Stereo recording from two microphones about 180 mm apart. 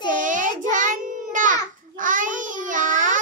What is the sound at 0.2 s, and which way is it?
Child singing, 45° right (ahead or behind).